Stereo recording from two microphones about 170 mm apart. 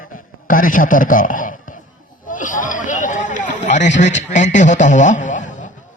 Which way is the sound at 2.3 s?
50° left (ahead or behind).